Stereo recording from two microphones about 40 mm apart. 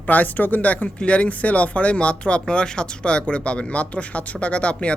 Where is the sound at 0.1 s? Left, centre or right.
Left.